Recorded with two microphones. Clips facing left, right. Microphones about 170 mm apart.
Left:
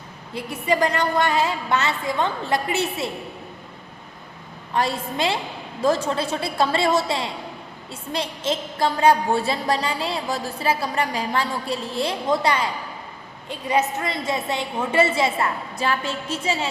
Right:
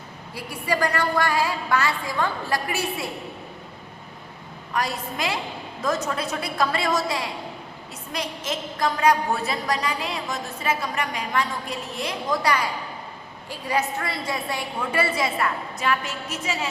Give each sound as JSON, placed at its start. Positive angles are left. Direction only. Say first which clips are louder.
{"t": 0.3, "sound": "a woman's voice", "louder": "left 4 dB", "side_deg": 20}
{"t": 4.7, "sound": "a woman's voice", "louder": "left 4 dB", "side_deg": 30}